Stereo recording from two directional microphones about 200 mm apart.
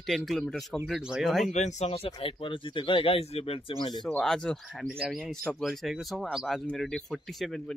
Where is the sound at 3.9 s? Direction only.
Centre (ahead or behind).